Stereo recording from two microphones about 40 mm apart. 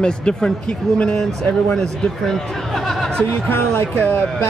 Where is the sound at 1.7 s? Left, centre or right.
Centre.